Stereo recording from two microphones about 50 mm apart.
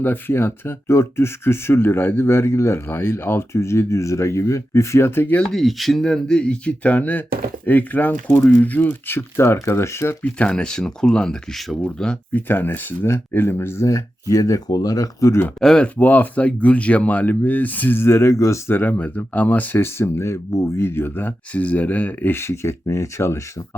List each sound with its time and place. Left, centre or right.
0.0 s speech: left
5.4 s speech: centre
6.0 s speech: centre; by 10.2 s left
10.3 s speech: centre
12.3 s speech: left
13.1 s speech: left
16.0 s speech: left
18.7 s speech: left
21.5 s speech: left
22.3 s speech: left